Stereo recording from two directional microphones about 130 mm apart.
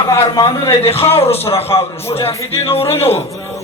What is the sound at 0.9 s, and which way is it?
Speech, 50° left (ahead or behind).